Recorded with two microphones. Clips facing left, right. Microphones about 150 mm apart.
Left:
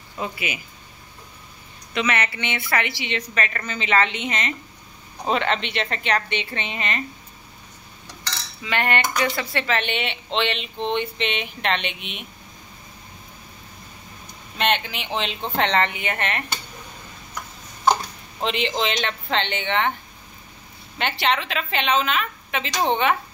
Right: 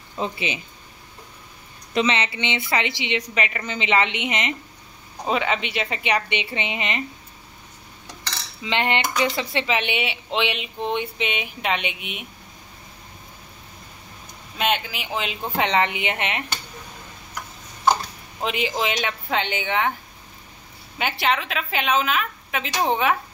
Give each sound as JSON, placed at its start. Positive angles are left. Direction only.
{"t": 0.2, "sound": "speech", "side_deg": -25}
{"t": 2.0, "sound": "speech", "side_deg": -20}
{"t": 5.2, "sound": "speech", "side_deg": -5}
{"t": 8.6, "sound": "speech", "side_deg": -20}
{"t": 14.6, "sound": "speech", "side_deg": -5}
{"t": 18.4, "sound": "speech", "side_deg": -5}
{"t": 21.0, "sound": "a woman's voice", "side_deg": -5}